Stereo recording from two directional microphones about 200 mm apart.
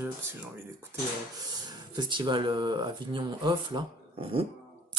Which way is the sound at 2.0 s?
25° right (ahead or behind).